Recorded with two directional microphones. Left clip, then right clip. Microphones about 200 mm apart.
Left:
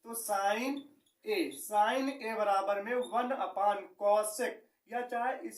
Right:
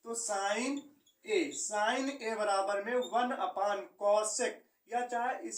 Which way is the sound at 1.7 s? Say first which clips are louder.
Left 4 dB; 20° left (ahead or behind).